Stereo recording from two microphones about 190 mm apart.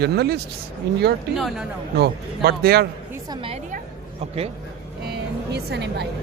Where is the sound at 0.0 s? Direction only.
60° right (ahead or behind).